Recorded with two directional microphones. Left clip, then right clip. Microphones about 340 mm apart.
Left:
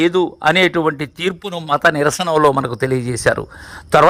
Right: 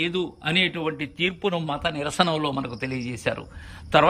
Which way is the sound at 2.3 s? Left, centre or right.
Left.